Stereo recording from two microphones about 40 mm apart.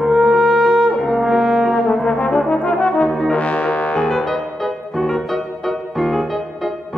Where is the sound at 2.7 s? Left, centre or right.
Left.